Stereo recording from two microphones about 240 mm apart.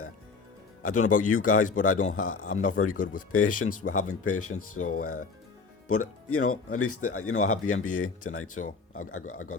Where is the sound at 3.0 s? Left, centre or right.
Left.